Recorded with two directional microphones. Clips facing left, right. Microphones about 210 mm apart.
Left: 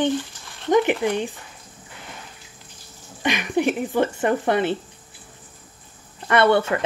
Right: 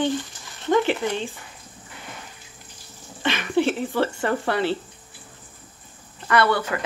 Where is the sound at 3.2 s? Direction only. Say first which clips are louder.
Even; 15° left (ahead or behind).